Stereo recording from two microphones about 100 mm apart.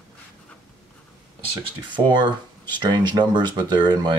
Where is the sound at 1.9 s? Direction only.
50° right (ahead or behind).